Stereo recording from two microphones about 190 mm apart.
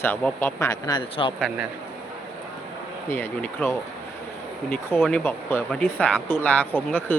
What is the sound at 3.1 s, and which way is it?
Speech, 10° left (ahead or behind).